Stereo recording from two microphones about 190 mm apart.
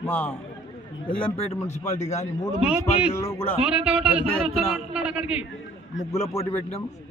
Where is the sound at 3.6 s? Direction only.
5° right (ahead or behind).